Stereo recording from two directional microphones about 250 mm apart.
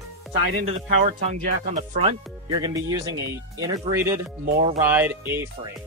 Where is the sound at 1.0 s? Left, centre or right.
Right.